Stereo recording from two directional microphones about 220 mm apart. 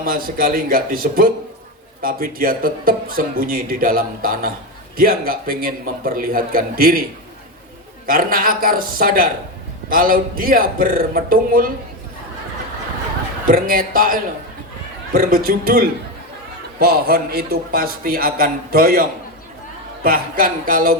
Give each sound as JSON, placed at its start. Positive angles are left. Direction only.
{"t": 0.0, "sound": "a man's voice", "side_deg": -40}
{"t": 8.0, "sound": "a man's voice", "side_deg": -40}
{"t": 13.5, "sound": "a man's voice", "side_deg": -40}
{"t": 20.1, "sound": "a man's voice", "side_deg": -40}